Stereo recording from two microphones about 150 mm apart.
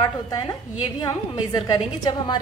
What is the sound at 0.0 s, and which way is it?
A woman's voice, 25° left (ahead or behind).